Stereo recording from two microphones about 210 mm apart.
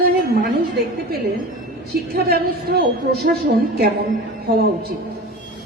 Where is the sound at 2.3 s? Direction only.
45° right (ahead or behind).